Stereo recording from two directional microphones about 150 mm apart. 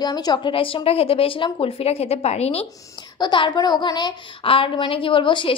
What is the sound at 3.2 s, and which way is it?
A woman's voice, 30° left (ahead or behind).